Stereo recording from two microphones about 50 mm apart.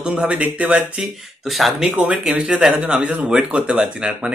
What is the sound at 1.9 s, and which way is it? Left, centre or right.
Speech, right.